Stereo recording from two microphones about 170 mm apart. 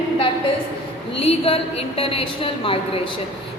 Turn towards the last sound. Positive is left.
turn(degrees=30)  # may be behind; listen again after turning